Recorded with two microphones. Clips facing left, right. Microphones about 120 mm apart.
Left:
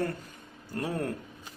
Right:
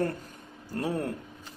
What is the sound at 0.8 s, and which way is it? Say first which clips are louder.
Speech: right 2 dB; 25° right (ahead or behind).